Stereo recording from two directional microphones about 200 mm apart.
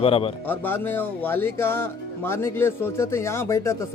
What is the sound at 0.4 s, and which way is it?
Speech, 10° left (ahead or behind).